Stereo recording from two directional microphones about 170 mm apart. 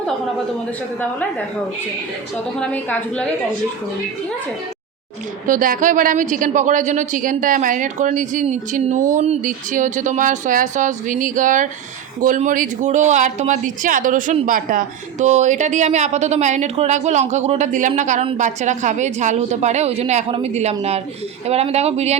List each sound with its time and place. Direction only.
2.6 s a woman's voice: 5° left (ahead or behind)
5.5 s a woman's voice: 55° right (ahead or behind)